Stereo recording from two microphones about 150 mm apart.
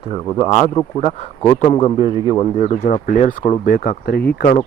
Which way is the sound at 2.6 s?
50° left (ahead or behind).